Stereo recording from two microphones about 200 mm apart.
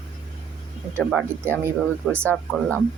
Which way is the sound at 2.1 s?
5° left (ahead or behind).